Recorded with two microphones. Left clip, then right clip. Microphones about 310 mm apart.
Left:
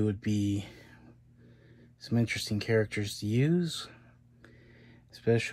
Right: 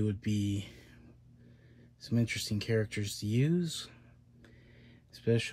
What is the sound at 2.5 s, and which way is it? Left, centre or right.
Speech, centre.